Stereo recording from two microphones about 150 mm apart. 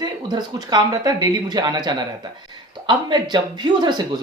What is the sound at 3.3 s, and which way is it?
Speech, 30° right (ahead or behind).